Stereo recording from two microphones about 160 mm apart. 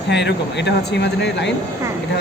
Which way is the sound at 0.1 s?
90° left.